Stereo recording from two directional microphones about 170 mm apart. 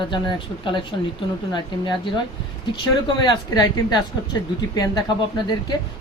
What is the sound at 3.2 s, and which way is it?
Speech, 25° left (ahead or behind).